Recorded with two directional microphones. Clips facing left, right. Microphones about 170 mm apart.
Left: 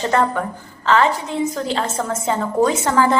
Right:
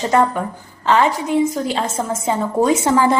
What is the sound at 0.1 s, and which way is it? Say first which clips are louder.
A woman's voice: right 4 dB; 15° right (ahead or behind).